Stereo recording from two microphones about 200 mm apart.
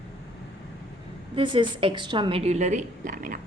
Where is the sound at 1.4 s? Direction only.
25° right (ahead or behind).